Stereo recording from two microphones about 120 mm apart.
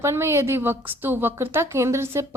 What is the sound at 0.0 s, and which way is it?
A woman's voice, 20° right (ahead or behind).